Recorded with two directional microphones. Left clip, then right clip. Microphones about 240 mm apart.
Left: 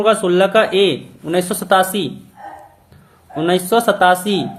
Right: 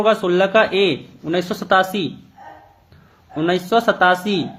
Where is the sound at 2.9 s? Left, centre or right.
Centre.